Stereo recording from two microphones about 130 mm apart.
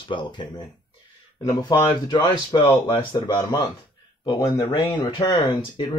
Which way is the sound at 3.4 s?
25° left (ahead or behind).